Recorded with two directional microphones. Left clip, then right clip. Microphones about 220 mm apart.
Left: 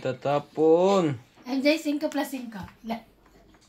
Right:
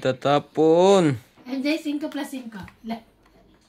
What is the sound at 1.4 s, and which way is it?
Speech, 35° left (ahead or behind).